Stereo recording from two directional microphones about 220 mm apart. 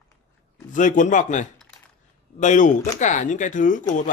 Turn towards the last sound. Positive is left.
turn(degrees=35)  # may be behind; listen again after turning